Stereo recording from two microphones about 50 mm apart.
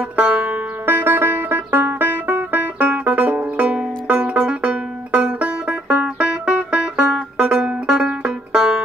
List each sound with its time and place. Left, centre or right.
0.1 s music: right
0.8 s music: right
2.8 s banjo: right